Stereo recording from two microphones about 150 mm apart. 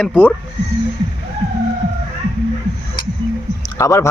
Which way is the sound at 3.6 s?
20° left (ahead or behind).